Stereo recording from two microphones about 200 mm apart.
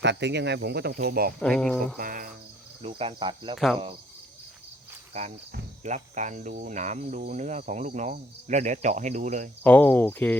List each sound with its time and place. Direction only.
0.0 s speech: 60° right (ahead or behind)
1.4 s speech: 5° left (ahead or behind)
2.0 s cricket: 45° right (ahead or behind)
2.8 s cricket: 30° right (ahead or behind)
5.8 s cricket: 35° right (ahead or behind)
9.6 s cricket: 10° left (ahead or behind)